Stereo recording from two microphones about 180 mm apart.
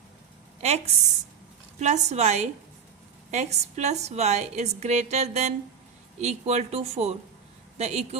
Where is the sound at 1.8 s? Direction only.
40° right (ahead or behind).